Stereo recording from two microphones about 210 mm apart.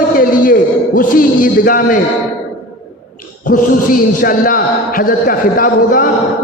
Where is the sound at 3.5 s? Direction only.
40° left (ahead or behind).